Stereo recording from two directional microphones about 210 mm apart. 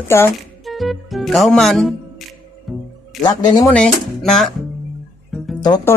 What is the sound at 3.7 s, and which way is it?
Speech, 5° left (ahead or behind).